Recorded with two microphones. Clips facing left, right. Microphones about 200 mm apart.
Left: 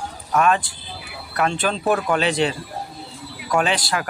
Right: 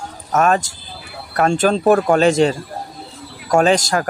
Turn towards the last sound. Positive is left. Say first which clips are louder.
# right 7 dB
turn(degrees=-45)  # may be behind; listen again after turning